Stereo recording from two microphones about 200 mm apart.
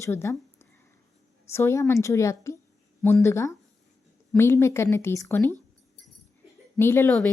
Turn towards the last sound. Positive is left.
turn(degrees=10)  # may be behind; listen again after turning